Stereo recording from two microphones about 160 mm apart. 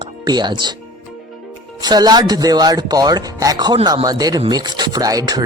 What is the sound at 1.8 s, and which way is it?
Speech, 25° right (ahead or behind).